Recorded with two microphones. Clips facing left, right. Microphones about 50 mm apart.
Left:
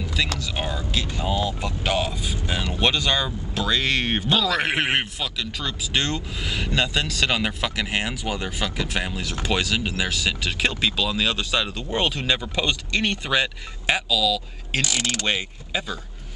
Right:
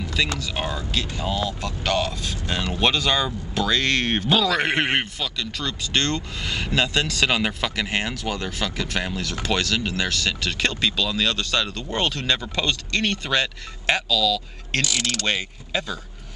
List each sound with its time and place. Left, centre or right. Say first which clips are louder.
0.0 s speech: right 1 dB; centre
14.8 s pulleys: even; left
15.2 s speech: even; centre